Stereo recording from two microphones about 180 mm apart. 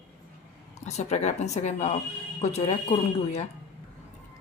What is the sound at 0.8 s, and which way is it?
A woman's voice, 40° left (ahead or behind).